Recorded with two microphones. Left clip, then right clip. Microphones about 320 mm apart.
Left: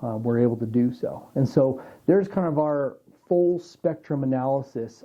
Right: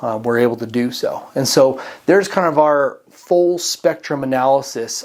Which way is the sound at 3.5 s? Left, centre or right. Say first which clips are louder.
Right 9 dB; centre.